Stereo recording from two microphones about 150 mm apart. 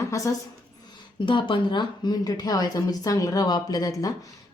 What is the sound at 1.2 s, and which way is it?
A woman's voice, 35° left (ahead or behind).